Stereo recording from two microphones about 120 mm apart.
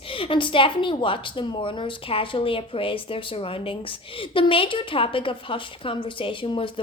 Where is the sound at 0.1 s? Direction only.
45° left (ahead or behind).